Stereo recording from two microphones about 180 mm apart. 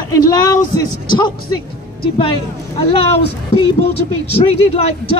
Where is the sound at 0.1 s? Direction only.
20° left (ahead or behind).